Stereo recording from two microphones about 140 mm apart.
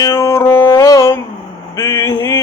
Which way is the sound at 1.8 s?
20° left (ahead or behind).